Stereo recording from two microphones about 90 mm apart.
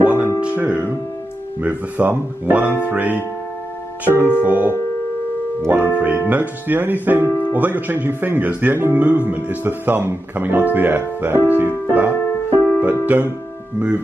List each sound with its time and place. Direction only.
0.0 s music: 15° right (ahead or behind)
1.6 s speech: 20° right (ahead or behind)
7.2 s music: 20° left (ahead or behind)
7.5 s speech: 20° right (ahead or behind)
11.9 s music: 15° right (ahead or behind)
12.4 s music: 25° left (ahead or behind)
13.0 s speech: 20° right (ahead or behind)